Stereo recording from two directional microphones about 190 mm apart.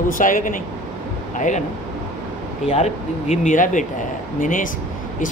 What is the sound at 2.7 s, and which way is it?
Speech, 35° left (ahead or behind).